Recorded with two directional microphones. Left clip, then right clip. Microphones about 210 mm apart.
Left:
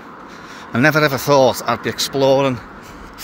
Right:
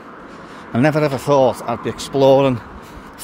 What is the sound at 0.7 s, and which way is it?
Speech, 10° right (ahead or behind).